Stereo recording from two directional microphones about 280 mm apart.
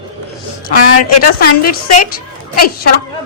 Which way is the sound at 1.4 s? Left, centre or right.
Left.